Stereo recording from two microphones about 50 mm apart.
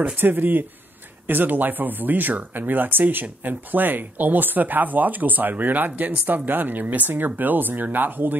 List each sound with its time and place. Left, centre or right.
0.1 s speech: right